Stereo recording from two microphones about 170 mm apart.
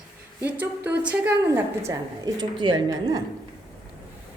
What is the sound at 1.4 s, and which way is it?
A woman's voice, 20° right (ahead or behind).